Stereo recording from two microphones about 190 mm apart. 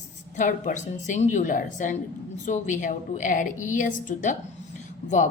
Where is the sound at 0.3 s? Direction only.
40° left (ahead or behind).